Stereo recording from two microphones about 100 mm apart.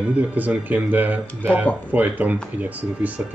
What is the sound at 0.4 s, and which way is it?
Speech, 15° right (ahead or behind).